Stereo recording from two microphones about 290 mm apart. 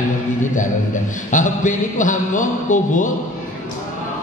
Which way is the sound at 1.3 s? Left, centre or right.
Left.